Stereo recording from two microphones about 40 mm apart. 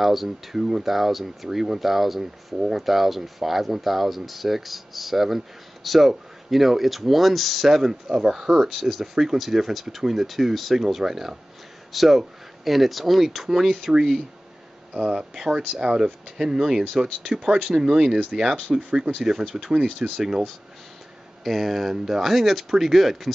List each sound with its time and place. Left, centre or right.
0.0 s speech: centre
21.5 s speech: centre